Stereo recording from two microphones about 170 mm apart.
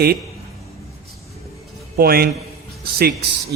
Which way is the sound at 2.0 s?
65° right (ahead or behind).